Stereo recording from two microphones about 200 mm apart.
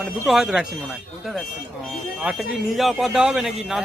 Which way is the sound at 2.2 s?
Centre (ahead or behind).